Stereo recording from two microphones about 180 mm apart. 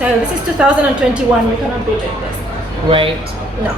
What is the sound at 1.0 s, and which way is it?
Speech, 5° right (ahead or behind).